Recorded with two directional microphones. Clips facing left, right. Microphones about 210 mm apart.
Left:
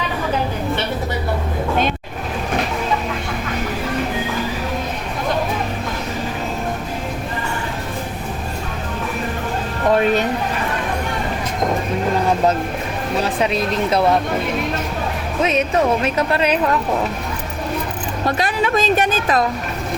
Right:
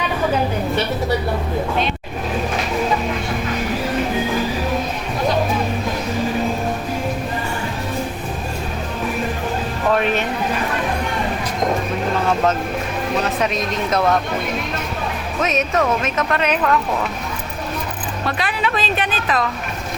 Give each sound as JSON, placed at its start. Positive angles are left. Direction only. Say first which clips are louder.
{"t": 13.4, "sound": "speech", "louder": "left 2 dB", "side_deg": 30}
{"t": 15.4, "sound": "speech", "louder": "left 2 dB", "side_deg": 30}
{"t": 18.3, "sound": "speech", "louder": "left 4 dB", "side_deg": 40}